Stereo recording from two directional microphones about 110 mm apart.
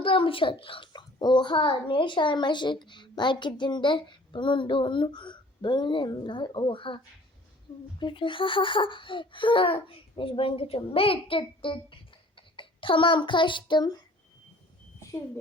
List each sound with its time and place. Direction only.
0.0 s a child's voice: 55° left (ahead or behind)